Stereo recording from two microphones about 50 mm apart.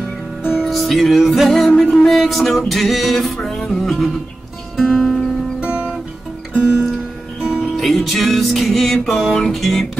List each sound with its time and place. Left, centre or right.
0.4 s music: centre
0.7 s music: centre
5.6 s music: right
7.6 s music: centre